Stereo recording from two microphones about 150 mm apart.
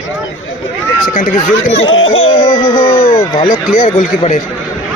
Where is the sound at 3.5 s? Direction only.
60° left (ahead or behind).